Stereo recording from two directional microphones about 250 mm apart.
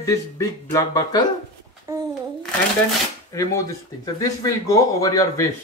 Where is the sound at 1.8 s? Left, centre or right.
Centre.